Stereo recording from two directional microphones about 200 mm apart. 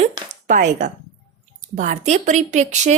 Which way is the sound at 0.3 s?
40° right (ahead or behind).